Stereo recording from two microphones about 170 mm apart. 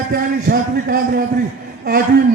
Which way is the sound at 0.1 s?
60° right (ahead or behind).